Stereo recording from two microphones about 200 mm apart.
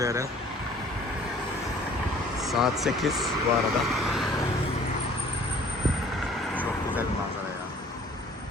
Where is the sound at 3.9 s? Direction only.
Centre (ahead or behind).